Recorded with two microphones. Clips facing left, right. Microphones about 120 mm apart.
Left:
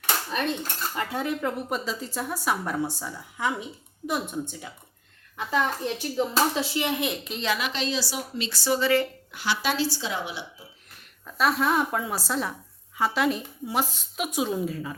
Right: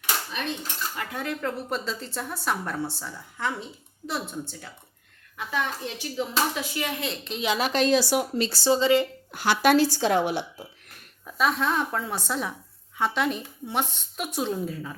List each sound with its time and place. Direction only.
0.3 s dishes: 45° left (ahead or behind)
0.9 s a woman's voice: 20° left (ahead or behind)
5.4 s a child's voice: 35° left (ahead or behind)
6.6 s speech: 25° left (ahead or behind)
7.6 s a woman's voice: 50° right (ahead or behind)
8.4 s speech: 30° right (ahead or behind)
9.3 s a woman's voice: 50° right (ahead or behind)
11.3 s a woman's voice: 5° left (ahead or behind)